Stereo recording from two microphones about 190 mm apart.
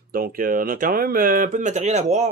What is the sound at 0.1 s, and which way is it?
Speech, 50° right (ahead or behind).